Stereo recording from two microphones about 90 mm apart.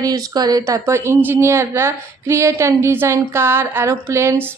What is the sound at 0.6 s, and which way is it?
A woman's voice, 30° right (ahead or behind).